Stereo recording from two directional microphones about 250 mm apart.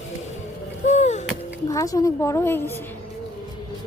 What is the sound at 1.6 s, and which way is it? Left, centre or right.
A woman's voice, centre.